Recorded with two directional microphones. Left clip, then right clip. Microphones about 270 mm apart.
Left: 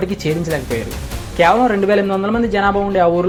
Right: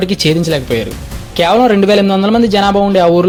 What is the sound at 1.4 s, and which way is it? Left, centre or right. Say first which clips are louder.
Speech: right 3 dB; right.